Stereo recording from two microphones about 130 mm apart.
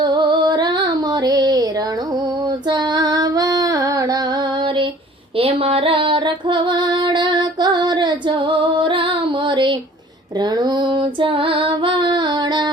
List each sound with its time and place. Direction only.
0.0 s female singing: 35° right (ahead or behind)
5.4 s music: 45° right (ahead or behind)
10.4 s female singing: 35° right (ahead or behind)